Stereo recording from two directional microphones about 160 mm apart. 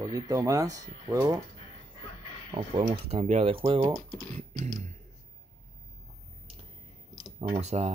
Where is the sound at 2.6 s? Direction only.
45° right (ahead or behind).